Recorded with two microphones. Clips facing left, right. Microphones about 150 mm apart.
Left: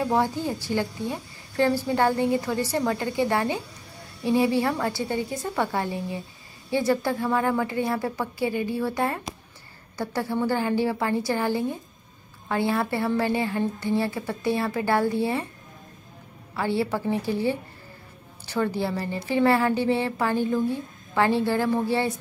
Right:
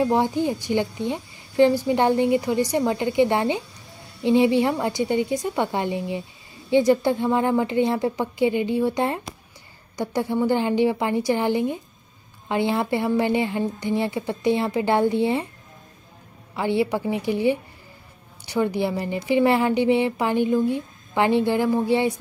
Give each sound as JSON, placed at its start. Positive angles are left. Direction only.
{"t": 0.0, "sound": "a woman's voice", "side_deg": -15}
{"t": 16.5, "sound": "a woman's voice", "side_deg": -15}